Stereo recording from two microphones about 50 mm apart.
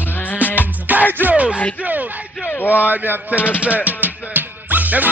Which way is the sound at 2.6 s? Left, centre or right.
Left.